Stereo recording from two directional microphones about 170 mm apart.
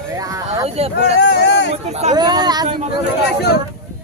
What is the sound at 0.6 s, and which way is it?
Speech, 35° right (ahead or behind).